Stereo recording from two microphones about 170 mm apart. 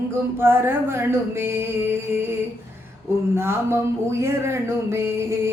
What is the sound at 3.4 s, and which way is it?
Speech, 15° right (ahead or behind).